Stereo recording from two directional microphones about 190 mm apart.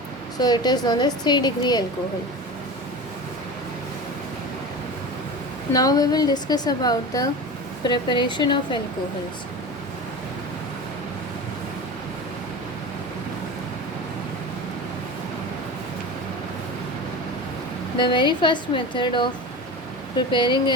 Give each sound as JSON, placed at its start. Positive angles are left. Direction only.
{"t": 0.3, "sound": "a woman's voice", "side_deg": 20}
{"t": 5.7, "sound": "a woman's voice", "side_deg": 20}
{"t": 17.9, "sound": "a woman's voice", "side_deg": 25}